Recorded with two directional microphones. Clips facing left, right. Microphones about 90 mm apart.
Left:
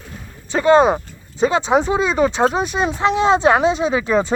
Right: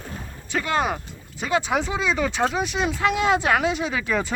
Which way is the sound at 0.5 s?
25° left (ahead or behind).